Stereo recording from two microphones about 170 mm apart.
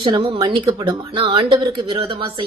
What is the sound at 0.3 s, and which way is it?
Speech, 20° right (ahead or behind).